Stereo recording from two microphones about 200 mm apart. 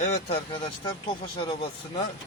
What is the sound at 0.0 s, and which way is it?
Speech, 30° left (ahead or behind).